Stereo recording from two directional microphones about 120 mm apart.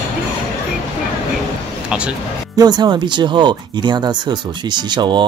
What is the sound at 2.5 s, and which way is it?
Speech, 35° right (ahead or behind).